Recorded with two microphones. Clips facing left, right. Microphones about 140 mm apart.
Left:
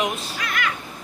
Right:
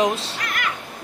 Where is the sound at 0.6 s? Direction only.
50° right (ahead or behind).